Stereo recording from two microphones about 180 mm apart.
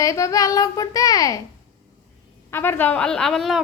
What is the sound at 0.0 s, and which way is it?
Child singing, 15° left (ahead or behind).